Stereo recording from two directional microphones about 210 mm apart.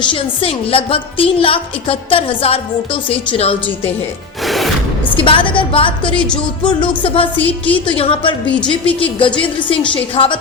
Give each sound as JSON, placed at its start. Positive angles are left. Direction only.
{"t": 0.0, "sound": "a woman's voice", "side_deg": 25}
{"t": 4.4, "sound": "music", "side_deg": 0}
{"t": 5.1, "sound": "a woman's voice", "side_deg": 25}